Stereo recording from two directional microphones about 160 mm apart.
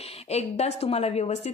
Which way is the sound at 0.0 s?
40° left (ahead or behind).